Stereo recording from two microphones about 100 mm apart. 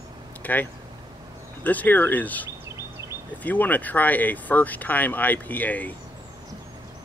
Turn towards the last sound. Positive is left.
turn(degrees=15)  # may be behind; listen again after turning